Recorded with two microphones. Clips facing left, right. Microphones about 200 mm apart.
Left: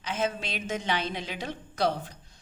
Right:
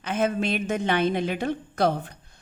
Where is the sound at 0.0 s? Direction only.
55° right (ahead or behind).